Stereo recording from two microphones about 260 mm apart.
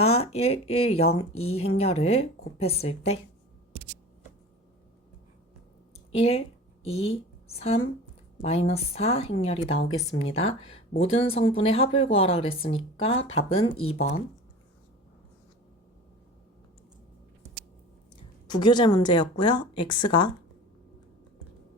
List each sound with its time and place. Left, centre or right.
0.0 s speech: left
6.1 s a woman's voice: left
18.4 s speech: centre